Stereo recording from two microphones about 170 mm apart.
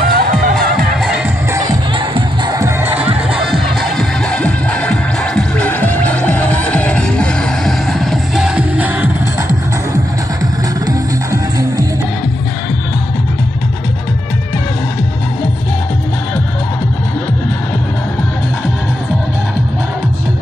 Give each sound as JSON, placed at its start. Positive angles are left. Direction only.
{"t": 0.0, "sound": "music", "side_deg": -55}
{"t": 1.5, "sound": "music", "side_deg": -25}
{"t": 2.8, "sound": "music", "side_deg": -10}
{"t": 3.4, "sound": "music", "side_deg": 0}